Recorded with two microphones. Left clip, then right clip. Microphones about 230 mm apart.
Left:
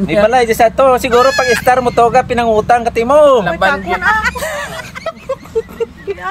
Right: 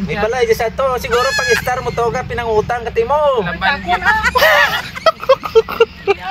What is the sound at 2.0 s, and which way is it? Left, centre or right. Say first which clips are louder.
Speech: left 8 dB; left.